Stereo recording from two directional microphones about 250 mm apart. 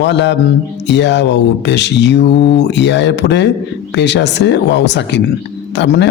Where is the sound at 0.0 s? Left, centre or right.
Left.